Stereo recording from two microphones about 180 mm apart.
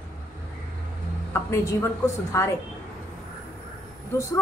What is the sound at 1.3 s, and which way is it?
A woman's voice, 15° left (ahead or behind).